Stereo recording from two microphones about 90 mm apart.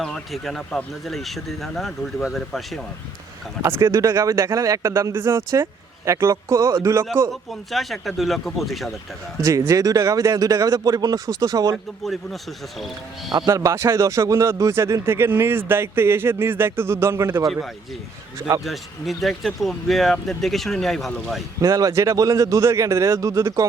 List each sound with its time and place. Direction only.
0.0 s speech: centre (ahead or behind)
3.8 s speech: 35° right (ahead or behind)
7.7 s speech: centre (ahead or behind)
9.4 s speech: 30° right (ahead or behind)
12.0 s speech: centre (ahead or behind)
13.5 s speech: 35° right (ahead or behind)
18.6 s speech: centre (ahead or behind)
21.6 s speech: 40° right (ahead or behind)